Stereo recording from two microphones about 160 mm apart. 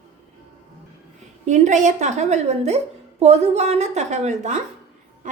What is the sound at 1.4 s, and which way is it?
A woman's voice, 45° right (ahead or behind).